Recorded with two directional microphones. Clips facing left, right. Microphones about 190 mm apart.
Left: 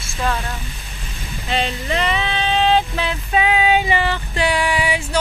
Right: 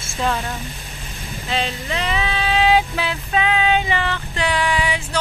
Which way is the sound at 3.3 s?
10° left (ahead or behind).